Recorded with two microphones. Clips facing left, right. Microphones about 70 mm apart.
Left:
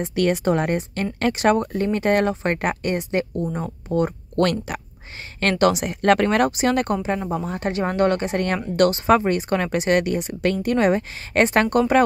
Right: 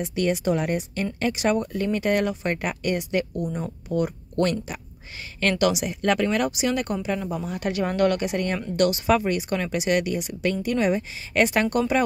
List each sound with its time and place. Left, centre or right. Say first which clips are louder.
0.1 s speech: left 4 dB; left
4.4 s speech: left 3 dB; left
5.4 s speech: left 3 dB; left